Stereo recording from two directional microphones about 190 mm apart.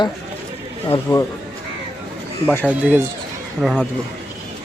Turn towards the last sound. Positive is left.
turn(degrees=-5)  # may be behind; listen again after turning